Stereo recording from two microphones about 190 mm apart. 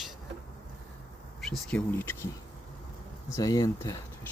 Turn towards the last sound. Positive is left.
turn(degrees=20)  # may be behind; listen again after turning